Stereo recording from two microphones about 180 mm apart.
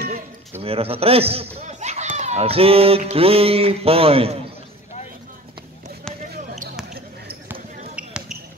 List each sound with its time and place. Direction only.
0.6 s speech: 35° right (ahead or behind)
7.9 s basketball bounce: 5° right (ahead or behind)